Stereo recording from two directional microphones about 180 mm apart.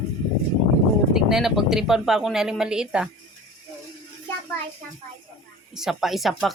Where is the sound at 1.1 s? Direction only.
Centre (ahead or behind).